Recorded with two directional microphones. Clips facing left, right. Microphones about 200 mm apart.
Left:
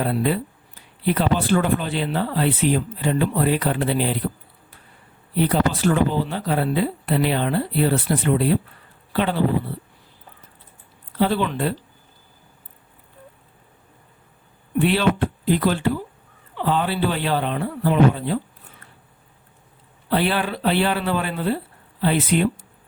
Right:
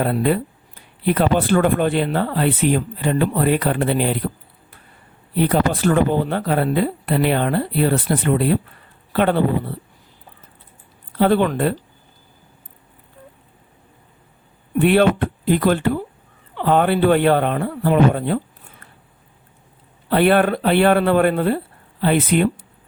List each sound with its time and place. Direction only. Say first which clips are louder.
0.0 s speech: right 3 dB; 55° right (ahead or behind)
5.4 s speech: right 2 dB; 55° right (ahead or behind)
11.2 s speech: right 5 dB; 55° right (ahead or behind)
14.8 s speech: right 4 dB; 55° right (ahead or behind)
20.1 s speech: right 7 dB; 55° right (ahead or behind)